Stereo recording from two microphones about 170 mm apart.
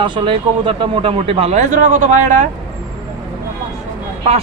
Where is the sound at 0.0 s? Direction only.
30° right (ahead or behind); by 2.5 s 45° right (ahead or behind).